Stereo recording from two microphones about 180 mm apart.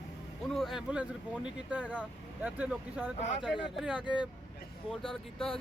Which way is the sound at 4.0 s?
25° left (ahead or behind).